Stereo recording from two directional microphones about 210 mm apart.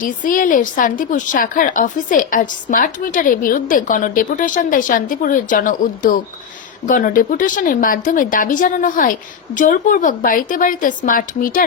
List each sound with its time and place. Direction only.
0.0 s a woman's voice: 40° left (ahead or behind)